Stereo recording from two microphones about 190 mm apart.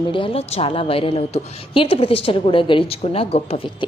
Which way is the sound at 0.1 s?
30° left (ahead or behind).